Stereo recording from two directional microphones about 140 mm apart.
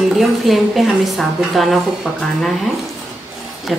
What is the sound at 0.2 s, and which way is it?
A woman's voice, centre (ahead or behind).